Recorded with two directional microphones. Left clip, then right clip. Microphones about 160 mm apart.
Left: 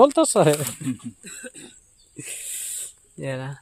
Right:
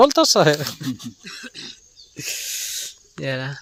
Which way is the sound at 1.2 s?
45° left (ahead or behind).